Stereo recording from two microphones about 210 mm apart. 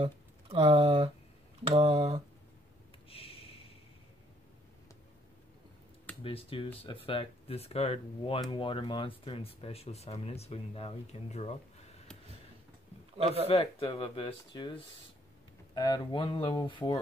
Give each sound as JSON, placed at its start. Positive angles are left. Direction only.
{"t": 0.0, "sound": "speech", "side_deg": -30}
{"t": 3.1, "sound": "a sound", "side_deg": 25}
{"t": 6.2, "sound": "speech", "side_deg": 25}
{"t": 13.1, "sound": "a man's voice", "side_deg": -30}
{"t": 13.5, "sound": "speech", "side_deg": 25}